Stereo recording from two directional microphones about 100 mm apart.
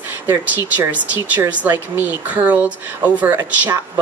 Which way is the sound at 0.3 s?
20° right (ahead or behind).